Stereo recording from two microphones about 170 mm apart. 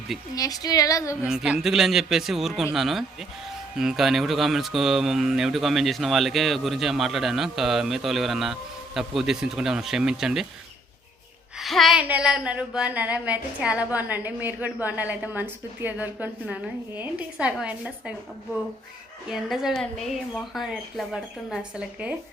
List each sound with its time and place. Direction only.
0.3 s speech: 20° left (ahead or behind)
1.2 s speech: 5° right (ahead or behind)
11.6 s speech: centre (ahead or behind)
19.3 s speech: centre (ahead or behind)